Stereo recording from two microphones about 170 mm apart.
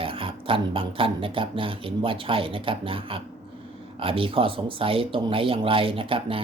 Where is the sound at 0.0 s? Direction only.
30° right (ahead or behind).